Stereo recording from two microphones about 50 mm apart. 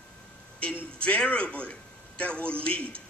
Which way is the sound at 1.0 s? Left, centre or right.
Centre.